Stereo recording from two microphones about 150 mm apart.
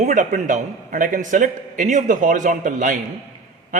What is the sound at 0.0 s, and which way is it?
A man's voice, 55° right (ahead or behind).